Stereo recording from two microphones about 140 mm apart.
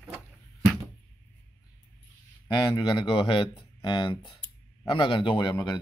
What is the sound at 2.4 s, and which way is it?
A man's voice, 30° left (ahead or behind).